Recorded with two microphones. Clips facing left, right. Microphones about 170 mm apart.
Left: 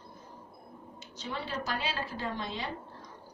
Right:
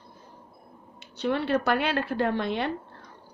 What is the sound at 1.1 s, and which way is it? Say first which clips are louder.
A woman's voice: right 12 dB; 65° right (ahead or behind).